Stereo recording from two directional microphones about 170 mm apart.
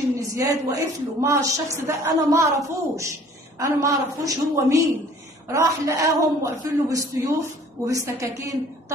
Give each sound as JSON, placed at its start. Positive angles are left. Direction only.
{"t": 0.4, "sound": "a man's voice", "side_deg": -15}